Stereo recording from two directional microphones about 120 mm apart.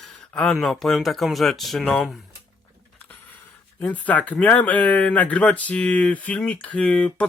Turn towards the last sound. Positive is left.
turn(degrees=10)  # may be behind; listen again after turning